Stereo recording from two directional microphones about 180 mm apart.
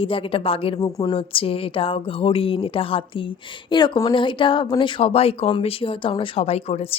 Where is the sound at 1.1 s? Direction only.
30° left (ahead or behind).